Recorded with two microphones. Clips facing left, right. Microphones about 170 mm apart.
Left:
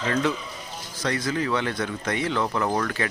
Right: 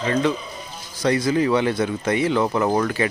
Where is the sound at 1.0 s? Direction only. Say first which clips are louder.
Right 7 dB; 10° right (ahead or behind).